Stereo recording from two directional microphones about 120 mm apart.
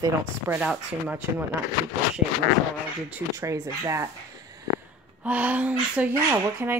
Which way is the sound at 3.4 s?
25° right (ahead or behind).